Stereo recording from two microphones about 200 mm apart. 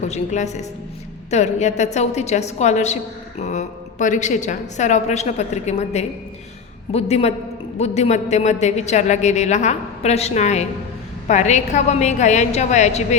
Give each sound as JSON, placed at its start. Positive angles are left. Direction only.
{"t": 0.0, "sound": "a woman's voice", "side_deg": 35}